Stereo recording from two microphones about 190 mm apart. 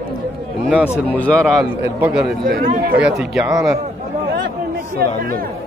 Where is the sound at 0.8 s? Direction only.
10° left (ahead or behind).